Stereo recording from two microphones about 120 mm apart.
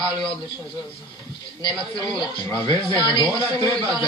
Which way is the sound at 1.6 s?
35° left (ahead or behind).